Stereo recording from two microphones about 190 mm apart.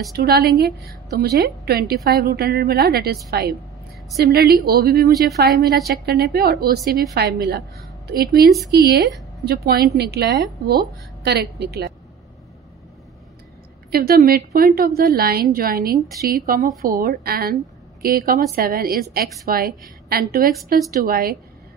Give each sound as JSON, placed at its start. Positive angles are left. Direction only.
{"t": 0.1, "sound": "a woman's voice", "side_deg": -55}
{"t": 14.0, "sound": "a woman's voice", "side_deg": -50}